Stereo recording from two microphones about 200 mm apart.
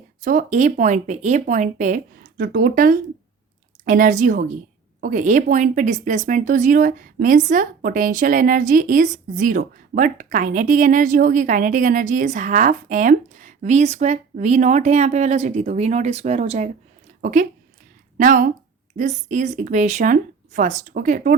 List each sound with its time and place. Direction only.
0.2 s a woman's voice: 40° right (ahead or behind)